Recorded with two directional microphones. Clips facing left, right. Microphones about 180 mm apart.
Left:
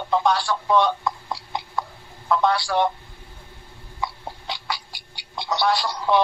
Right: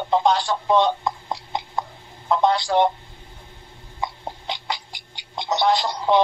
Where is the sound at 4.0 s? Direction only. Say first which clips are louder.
Right 1 dB; 20° right (ahead or behind).